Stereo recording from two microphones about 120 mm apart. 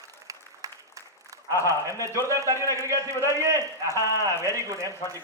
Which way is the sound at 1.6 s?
30° right (ahead or behind).